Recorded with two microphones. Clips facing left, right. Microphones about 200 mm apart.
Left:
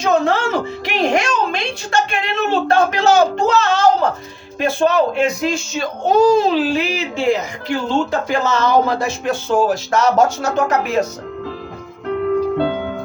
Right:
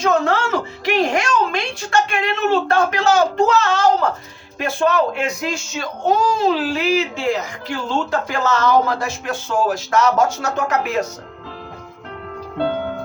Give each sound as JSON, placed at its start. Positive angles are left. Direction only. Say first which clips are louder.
{"t": 0.0, "sound": "speech", "louder": "left 1 dB", "side_deg": 20}
{"t": 0.9, "sound": "music", "louder": "right 1 dB", "side_deg": 25}
{"t": 1.9, "sound": "speech", "louder": "right 1 dB", "side_deg": 25}